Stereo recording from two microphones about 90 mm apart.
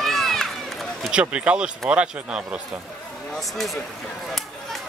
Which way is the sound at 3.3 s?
Centre (ahead or behind).